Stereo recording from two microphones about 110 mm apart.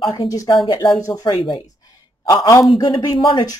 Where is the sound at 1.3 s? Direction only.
45° left (ahead or behind).